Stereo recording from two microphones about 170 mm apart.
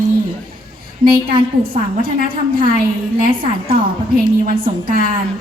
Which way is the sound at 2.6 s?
55° right (ahead or behind).